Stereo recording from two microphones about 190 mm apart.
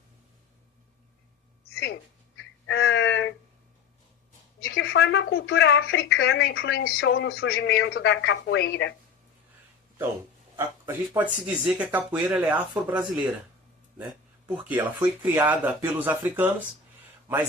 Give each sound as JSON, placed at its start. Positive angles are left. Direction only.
{"t": 1.7, "sound": "a sound", "side_deg": 55}
{"t": 2.6, "sound": "a sound", "side_deg": 85}
{"t": 4.6, "sound": "a woman's voice", "side_deg": 55}
{"t": 6.0, "sound": "speech", "side_deg": 65}
{"t": 7.5, "sound": "speech", "side_deg": 70}
{"t": 10.6, "sound": "speech", "side_deg": -10}
{"t": 14.5, "sound": "speech", "side_deg": -10}